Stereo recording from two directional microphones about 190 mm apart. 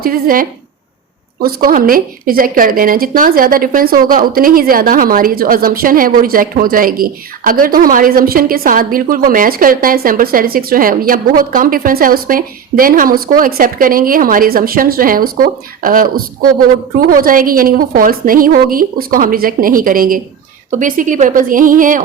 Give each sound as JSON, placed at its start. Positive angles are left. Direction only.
{"t": 0.0, "sound": "a woman's voice", "side_deg": -50}